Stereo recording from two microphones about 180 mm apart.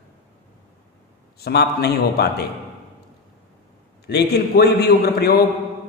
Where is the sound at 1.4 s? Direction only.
65° left (ahead or behind).